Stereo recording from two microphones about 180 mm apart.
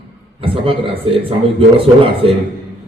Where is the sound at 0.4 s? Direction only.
30° right (ahead or behind).